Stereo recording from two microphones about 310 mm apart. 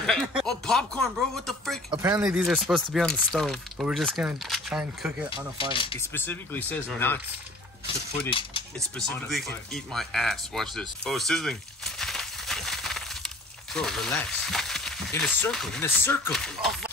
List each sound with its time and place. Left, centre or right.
0.0 s speech: centre
1.9 s speech: centre
5.6 s speech: centre
8.3 s speech: centre
8.7 s speech: centre